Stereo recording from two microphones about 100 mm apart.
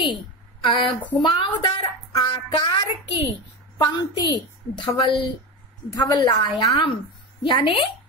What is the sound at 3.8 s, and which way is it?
A woman's voice, 40° left (ahead or behind).